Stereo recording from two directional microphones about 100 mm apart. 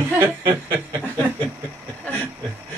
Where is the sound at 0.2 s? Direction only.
25° right (ahead or behind).